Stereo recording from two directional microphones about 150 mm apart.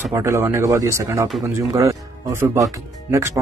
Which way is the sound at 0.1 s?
20° right (ahead or behind).